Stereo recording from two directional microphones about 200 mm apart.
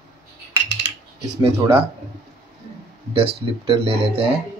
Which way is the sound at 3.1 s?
25° right (ahead or behind).